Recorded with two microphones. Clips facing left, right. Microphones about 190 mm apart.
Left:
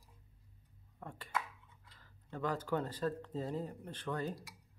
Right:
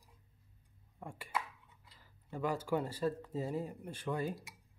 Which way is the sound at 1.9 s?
10° right (ahead or behind).